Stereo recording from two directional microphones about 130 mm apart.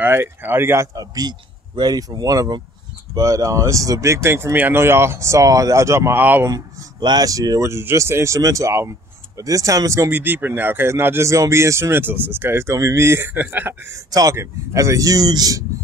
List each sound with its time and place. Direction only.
0.0 s speech: 15° right (ahead or behind)
6.5 s speech: 35° right (ahead or behind)